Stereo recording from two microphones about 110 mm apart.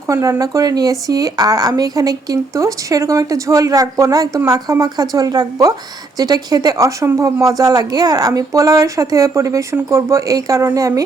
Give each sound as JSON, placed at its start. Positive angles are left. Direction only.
{"t": 0.1, "sound": "speech", "side_deg": -30}